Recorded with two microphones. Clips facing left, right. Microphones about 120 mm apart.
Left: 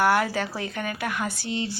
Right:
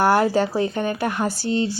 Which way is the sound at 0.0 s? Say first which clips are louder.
Right 5 dB; 30° right (ahead or behind).